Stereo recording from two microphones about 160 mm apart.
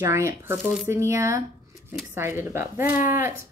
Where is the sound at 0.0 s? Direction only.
15° right (ahead or behind).